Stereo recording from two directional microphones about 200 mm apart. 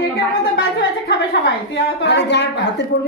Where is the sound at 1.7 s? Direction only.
60° left (ahead or behind).